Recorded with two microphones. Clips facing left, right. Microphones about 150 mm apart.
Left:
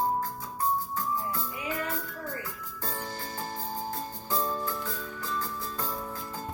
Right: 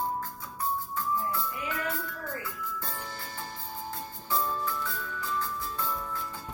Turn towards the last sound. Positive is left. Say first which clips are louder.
# even
turn(degrees=40)  # may be behind; listen again after turning